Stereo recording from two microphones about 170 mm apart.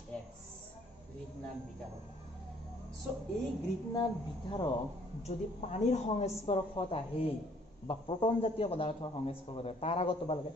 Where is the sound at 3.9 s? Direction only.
25° left (ahead or behind).